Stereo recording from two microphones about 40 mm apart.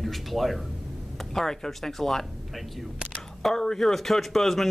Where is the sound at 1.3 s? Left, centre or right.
Centre.